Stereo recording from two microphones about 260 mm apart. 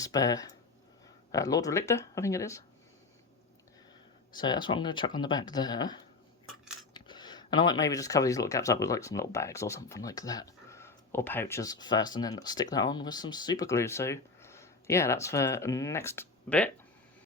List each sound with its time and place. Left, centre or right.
0.0 s speech: centre
4.4 s speech: centre